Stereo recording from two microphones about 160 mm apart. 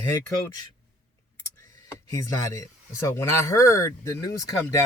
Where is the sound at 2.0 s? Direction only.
20° left (ahead or behind).